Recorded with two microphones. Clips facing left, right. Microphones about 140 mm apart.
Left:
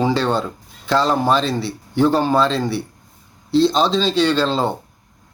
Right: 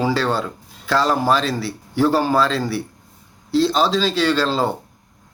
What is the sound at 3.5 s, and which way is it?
A man's voice, 5° right (ahead or behind).